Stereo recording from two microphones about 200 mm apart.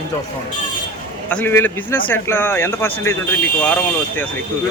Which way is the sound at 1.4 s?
10° left (ahead or behind).